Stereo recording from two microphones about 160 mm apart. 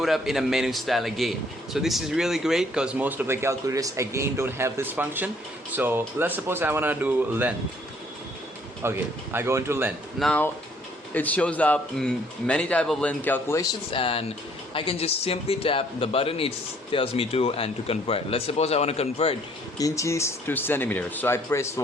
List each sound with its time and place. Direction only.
0.0 s a man's voice: centre (ahead or behind)
8.8 s speech: 15° right (ahead or behind)
10.2 s a man's voice: centre (ahead or behind)
13.9 s speech: 35° left (ahead or behind)
19.8 s a man's voice: 20° left (ahead or behind)